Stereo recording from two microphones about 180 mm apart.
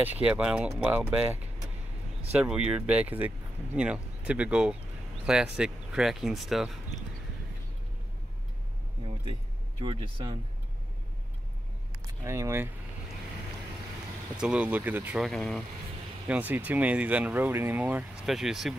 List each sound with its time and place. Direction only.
0.0 s speech: 10° right (ahead or behind)
9.8 s speech: 25° right (ahead or behind)
12.1 s speech: 15° right (ahead or behind)
14.3 s speech: 5° right (ahead or behind)
16.3 s speech: 10° right (ahead or behind)